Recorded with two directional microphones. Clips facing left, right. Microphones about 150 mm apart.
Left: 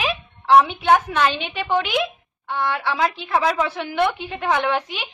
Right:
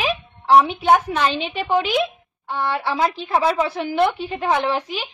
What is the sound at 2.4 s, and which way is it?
A woman's voice, 35° right (ahead or behind).